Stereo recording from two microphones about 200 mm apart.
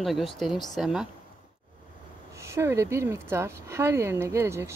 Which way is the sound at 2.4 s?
15° right (ahead or behind).